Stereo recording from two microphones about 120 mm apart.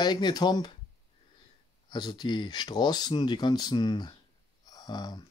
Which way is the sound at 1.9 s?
35° left (ahead or behind).